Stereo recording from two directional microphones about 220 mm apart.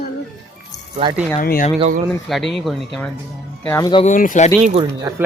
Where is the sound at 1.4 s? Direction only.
40° left (ahead or behind).